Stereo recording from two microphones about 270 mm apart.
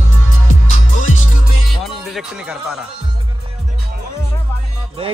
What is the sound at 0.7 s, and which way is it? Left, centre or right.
Music, left.